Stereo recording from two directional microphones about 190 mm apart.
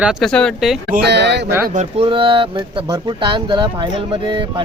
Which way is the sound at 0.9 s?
65° right (ahead or behind).